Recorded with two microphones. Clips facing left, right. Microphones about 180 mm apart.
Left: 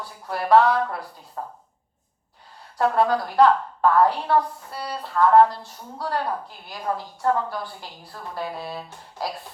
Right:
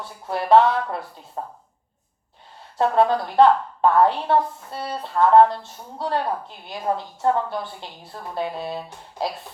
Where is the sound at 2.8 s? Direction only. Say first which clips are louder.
Right 2 dB; 25° right (ahead or behind).